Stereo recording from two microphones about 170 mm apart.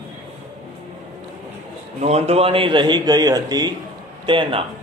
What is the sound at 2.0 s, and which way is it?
Speech, 40° right (ahead or behind).